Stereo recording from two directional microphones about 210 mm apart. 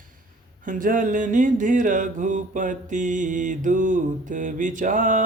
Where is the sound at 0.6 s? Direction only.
40° right (ahead or behind).